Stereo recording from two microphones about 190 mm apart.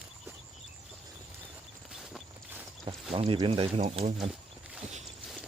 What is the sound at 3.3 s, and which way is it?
Speech, 30° right (ahead or behind).